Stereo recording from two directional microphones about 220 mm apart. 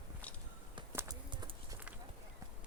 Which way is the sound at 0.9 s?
20° right (ahead or behind).